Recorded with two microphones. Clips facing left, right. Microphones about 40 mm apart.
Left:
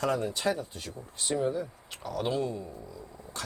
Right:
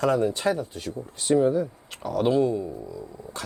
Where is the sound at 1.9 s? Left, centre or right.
Right.